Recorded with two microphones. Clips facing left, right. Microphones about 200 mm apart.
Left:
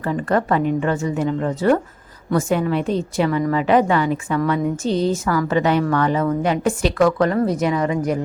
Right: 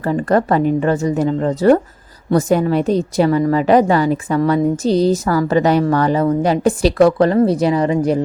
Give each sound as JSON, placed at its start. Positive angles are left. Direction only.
{"t": 0.0, "sound": "a woman's voice", "side_deg": -40}